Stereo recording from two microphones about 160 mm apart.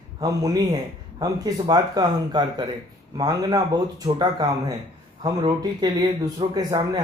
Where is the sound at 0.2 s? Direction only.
20° right (ahead or behind).